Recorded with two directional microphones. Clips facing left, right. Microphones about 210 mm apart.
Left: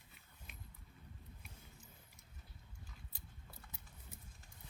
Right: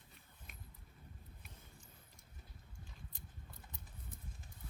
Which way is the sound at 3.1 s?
5° left (ahead or behind).